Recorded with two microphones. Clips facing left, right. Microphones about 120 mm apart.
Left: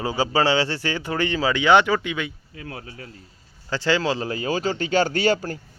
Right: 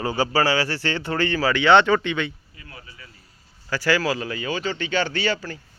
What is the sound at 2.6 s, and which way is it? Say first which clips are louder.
Speech: left 8 dB; 90° left.